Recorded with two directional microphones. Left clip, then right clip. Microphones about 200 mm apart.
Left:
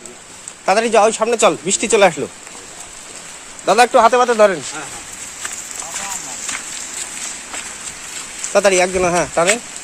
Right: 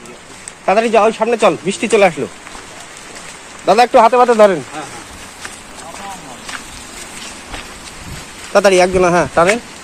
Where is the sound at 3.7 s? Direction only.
10° left (ahead or behind).